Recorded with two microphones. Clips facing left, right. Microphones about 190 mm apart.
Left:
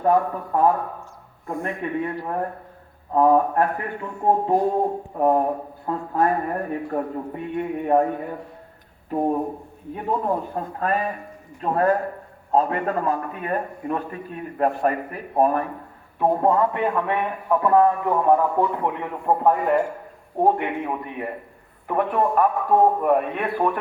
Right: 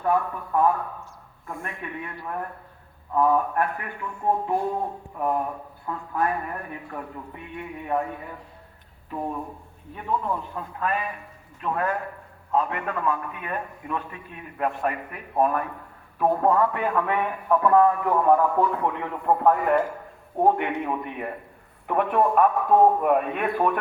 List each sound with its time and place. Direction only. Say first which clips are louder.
0.0 s a man's voice: left 5 dB; 40° left (ahead or behind)
1.6 s a man's voice: left 10 dB; 35° left (ahead or behind); by 23.8 s 5° left (ahead or behind)